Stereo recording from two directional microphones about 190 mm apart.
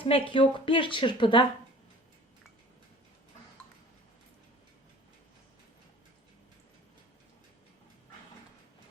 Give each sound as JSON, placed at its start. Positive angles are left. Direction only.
{"t": 0.0, "sound": "a woman's voice", "side_deg": 25}